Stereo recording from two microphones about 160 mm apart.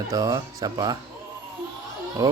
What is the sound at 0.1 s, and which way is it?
Speech, 20° right (ahead or behind).